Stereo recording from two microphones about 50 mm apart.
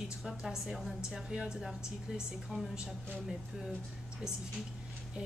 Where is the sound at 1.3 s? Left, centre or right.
Right.